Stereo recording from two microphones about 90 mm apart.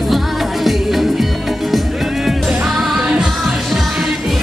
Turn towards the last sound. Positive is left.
turn(degrees=0)  # may be behind; listen again after turning